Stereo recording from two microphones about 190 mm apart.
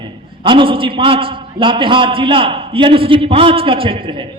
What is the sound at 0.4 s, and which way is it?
A man's voice, 25° right (ahead or behind).